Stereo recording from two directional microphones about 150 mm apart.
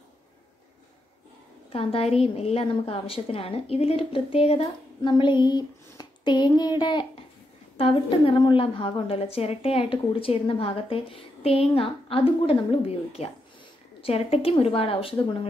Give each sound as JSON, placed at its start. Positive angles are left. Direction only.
{"t": 1.7, "sound": "a woman's voice", "side_deg": 40}
{"t": 5.1, "sound": "a woman's voice", "side_deg": 30}